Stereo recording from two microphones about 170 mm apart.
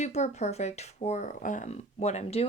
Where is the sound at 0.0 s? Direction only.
40° left (ahead or behind).